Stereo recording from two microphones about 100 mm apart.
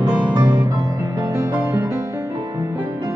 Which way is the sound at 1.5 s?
20° right (ahead or behind).